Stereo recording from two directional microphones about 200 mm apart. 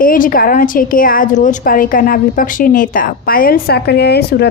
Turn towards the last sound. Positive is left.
turn(degrees=55)  # may be behind; listen again after turning